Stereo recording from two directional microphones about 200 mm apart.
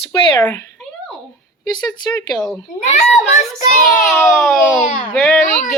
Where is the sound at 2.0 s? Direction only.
20° left (ahead or behind).